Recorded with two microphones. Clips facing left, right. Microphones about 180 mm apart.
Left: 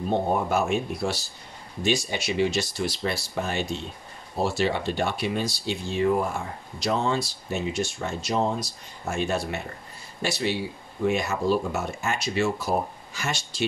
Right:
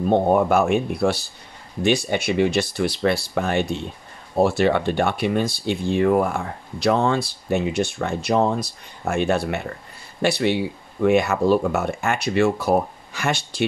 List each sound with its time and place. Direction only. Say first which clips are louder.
0.1 s speech: right 7 dB; 60° right (ahead or behind)